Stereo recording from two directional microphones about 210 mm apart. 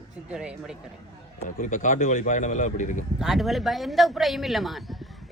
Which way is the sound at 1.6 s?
40° left (ahead or behind).